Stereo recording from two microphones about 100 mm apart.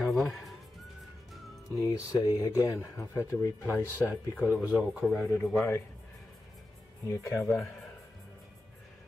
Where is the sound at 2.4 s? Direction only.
35° left (ahead or behind); by 4.6 s 20° left (ahead or behind).